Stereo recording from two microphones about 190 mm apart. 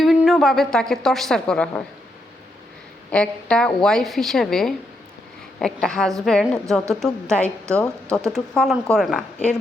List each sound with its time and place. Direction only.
0.0 s a woman's voice: centre (ahead or behind)
3.1 s a woman's voice: 5° left (ahead or behind)